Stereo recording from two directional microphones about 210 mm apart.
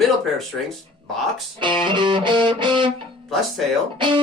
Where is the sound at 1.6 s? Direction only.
20° right (ahead or behind).